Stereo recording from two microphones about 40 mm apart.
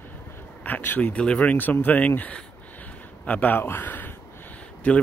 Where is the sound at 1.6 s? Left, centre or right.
Left.